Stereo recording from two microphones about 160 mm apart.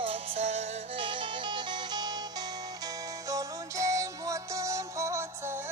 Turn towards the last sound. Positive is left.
turn(degrees=-15)  # may be behind; listen again after turning